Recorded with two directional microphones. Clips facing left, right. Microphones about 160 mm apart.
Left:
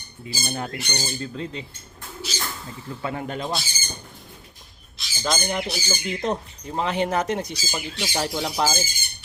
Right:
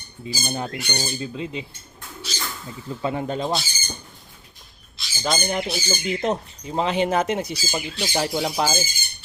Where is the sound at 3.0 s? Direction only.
25° right (ahead or behind).